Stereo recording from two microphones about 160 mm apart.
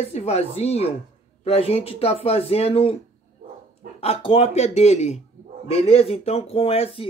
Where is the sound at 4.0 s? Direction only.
40° left (ahead or behind).